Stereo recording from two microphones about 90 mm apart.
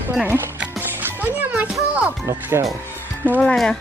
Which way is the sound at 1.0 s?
20° right (ahead or behind).